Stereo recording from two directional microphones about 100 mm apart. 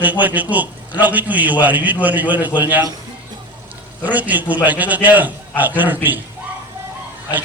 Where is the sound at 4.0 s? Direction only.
15° right (ahead or behind).